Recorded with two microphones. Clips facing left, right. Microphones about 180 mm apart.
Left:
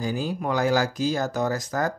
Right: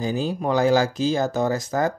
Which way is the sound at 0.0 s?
25° right (ahead or behind).